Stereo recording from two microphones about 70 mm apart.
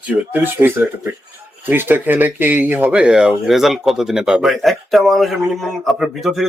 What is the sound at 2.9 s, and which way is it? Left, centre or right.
Speech, centre.